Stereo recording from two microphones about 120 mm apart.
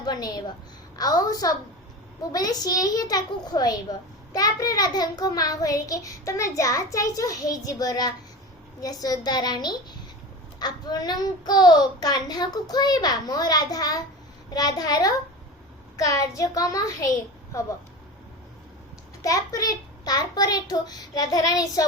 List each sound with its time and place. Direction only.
0.0 s a woman's voice: 35° left (ahead or behind)
19.2 s a child's voice: 30° left (ahead or behind)